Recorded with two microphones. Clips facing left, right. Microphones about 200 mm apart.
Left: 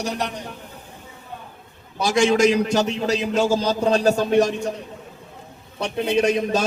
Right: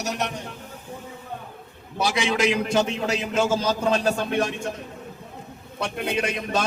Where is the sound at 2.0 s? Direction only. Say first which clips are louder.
Left 6 dB; 45° left (ahead or behind).